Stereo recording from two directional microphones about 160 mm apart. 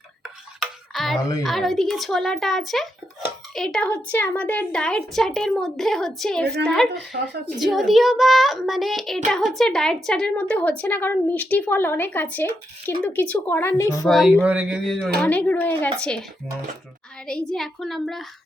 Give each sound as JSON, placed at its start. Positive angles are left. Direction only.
{"t": 0.6, "sound": "music", "side_deg": 0}
{"t": 1.2, "sound": "a woman's voice", "side_deg": 20}
{"t": 1.5, "sound": "a woman's voice", "side_deg": 0}
{"t": 7.1, "sound": "a woman's voice", "side_deg": -65}
{"t": 7.6, "sound": "a woman's voice", "side_deg": 0}
{"t": 14.1, "sound": "a woman's voice", "side_deg": 0}
{"t": 14.4, "sound": "a sound", "side_deg": -5}
{"t": 15.2, "sound": "speech", "side_deg": 10}
{"t": 17.5, "sound": "a woman's voice", "side_deg": 0}